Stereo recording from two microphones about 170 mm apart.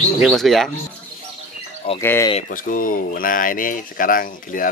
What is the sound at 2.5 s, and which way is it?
Speech, 55° left (ahead or behind).